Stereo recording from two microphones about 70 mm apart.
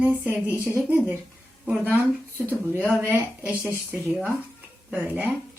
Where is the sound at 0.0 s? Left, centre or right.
Right.